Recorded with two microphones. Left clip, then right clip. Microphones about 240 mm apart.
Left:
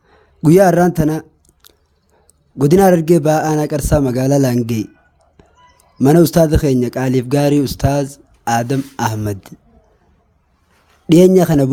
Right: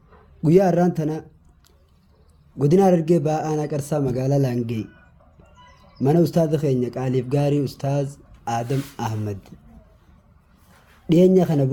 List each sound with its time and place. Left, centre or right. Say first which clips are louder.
0.4 s a man's voice: left 7 dB; left
6.0 s speech: left 8 dB; left
11.1 s speech: left 7 dB; left